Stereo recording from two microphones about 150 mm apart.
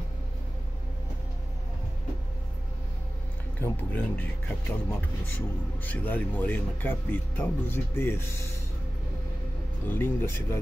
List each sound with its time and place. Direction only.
3.6 s speech: 15° left (ahead or behind)
9.8 s speech: 15° left (ahead or behind)